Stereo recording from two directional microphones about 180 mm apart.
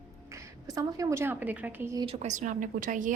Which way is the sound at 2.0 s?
35° right (ahead or behind).